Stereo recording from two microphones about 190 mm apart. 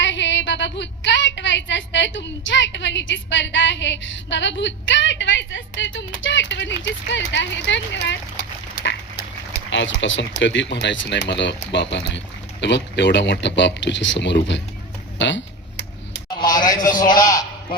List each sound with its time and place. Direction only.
0.0 s speech: 70° left (ahead or behind)
8.4 s duck: 65° left (ahead or behind)
9.6 s speech: 75° left (ahead or behind)
16.4 s a man's voice: 20° left (ahead or behind)